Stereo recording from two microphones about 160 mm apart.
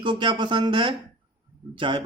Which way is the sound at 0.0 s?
30° right (ahead or behind).